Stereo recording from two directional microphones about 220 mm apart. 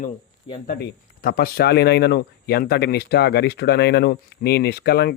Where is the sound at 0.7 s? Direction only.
45° left (ahead or behind).